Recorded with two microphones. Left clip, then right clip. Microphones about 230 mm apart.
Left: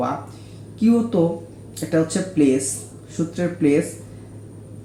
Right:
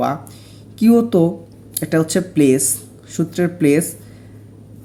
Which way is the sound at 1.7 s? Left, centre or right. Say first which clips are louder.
Right 3 dB; right.